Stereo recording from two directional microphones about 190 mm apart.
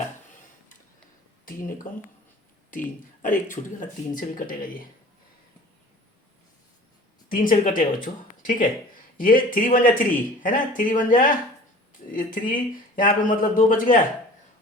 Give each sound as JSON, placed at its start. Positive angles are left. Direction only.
{"t": 2.6, "sound": "speech", "side_deg": 45}
{"t": 7.3, "sound": "speech", "side_deg": 45}